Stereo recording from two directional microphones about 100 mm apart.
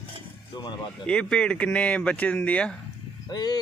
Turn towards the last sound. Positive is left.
turn(degrees=45)  # may be behind; listen again after turning